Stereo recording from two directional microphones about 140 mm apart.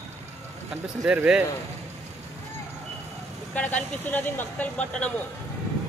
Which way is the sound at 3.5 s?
10° left (ahead or behind).